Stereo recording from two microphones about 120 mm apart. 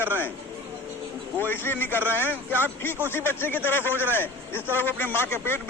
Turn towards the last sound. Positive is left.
turn(degrees=20)  # may be behind; listen again after turning